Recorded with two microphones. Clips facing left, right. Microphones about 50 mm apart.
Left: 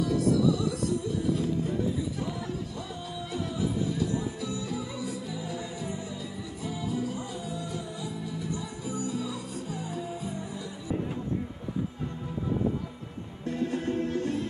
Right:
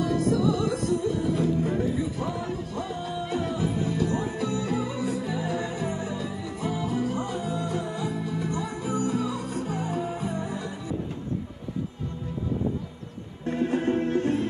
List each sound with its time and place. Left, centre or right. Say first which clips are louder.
0.0 s music: right 1 dB; right
13.5 s music: right 5 dB; right